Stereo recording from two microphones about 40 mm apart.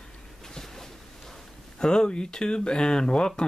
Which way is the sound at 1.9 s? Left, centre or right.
Left.